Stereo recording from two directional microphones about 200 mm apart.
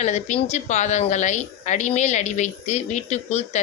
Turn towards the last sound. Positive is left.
turn(degrees=35)  # may be behind; listen again after turning